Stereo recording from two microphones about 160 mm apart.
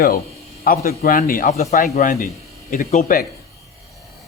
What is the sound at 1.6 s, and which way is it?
A man's voice, 45° left (ahead or behind).